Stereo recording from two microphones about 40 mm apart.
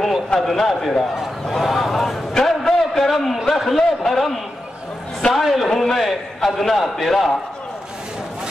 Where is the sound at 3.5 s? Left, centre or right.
Centre.